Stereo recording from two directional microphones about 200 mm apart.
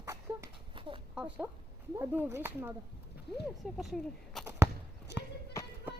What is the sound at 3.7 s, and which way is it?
Speech, centre (ahead or behind).